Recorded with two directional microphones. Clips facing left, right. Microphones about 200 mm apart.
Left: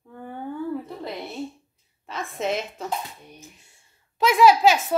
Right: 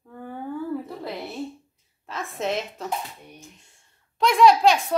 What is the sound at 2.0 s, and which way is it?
Speech, centre (ahead or behind).